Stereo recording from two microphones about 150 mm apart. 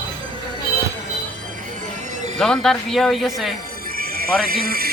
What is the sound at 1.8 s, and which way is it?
Music, 55° right (ahead or behind).